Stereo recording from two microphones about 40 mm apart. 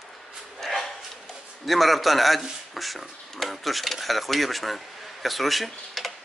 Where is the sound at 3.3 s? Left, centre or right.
Centre.